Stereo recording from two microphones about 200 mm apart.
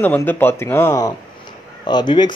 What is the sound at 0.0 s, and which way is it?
A man's voice, 10° left (ahead or behind).